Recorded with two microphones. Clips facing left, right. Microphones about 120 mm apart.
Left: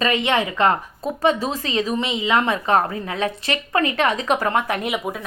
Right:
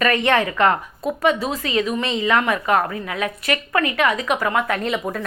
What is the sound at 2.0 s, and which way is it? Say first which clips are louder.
A woman's voice: right 1 dB; 15° left (ahead or behind).